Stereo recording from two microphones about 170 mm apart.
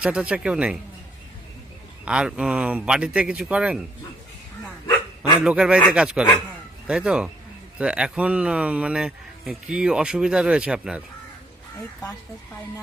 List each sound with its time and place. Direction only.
0.0 s speech: 5° right (ahead or behind)
2.0 s speech: 5° right (ahead or behind)
4.9 s dog: 25° left (ahead or behind)
5.4 s speech: 5° right (ahead or behind)